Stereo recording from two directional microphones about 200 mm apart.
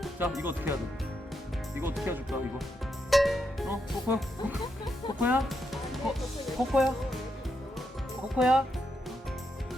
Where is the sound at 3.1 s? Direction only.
Centre (ahead or behind).